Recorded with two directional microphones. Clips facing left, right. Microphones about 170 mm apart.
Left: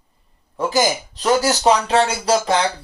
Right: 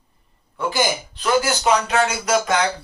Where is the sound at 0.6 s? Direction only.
40° left (ahead or behind).